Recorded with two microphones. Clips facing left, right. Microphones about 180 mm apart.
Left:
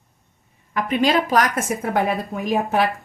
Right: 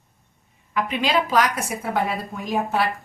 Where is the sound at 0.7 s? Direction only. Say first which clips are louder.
Left 3 dB; 45° left (ahead or behind).